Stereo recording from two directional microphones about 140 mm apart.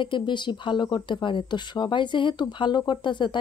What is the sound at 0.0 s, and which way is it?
Speech, 35° left (ahead or behind).